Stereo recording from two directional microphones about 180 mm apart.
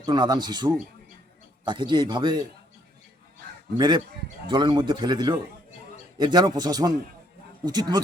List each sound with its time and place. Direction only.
0.0 s a man's voice: 25° right (ahead or behind)
3.8 s a man's voice: 25° right (ahead or behind)